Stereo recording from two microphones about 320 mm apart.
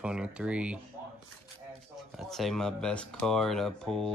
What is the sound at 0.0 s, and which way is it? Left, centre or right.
Speech, centre.